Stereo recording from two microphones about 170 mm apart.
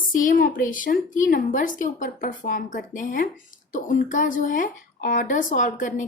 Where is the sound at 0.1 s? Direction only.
55° left (ahead or behind).